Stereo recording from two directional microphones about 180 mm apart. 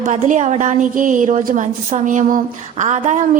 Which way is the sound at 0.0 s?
40° right (ahead or behind).